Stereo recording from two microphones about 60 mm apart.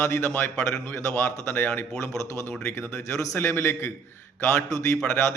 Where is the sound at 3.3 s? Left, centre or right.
Left.